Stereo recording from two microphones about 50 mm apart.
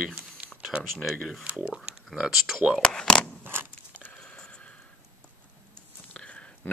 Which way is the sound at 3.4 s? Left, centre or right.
Right.